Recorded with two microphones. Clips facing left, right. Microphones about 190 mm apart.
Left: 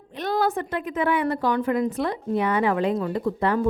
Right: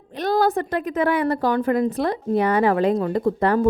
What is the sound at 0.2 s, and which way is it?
A woman's voice, 40° right (ahead or behind).